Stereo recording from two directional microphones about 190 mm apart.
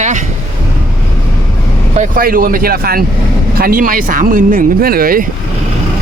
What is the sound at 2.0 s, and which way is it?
Speech, 50° right (ahead or behind).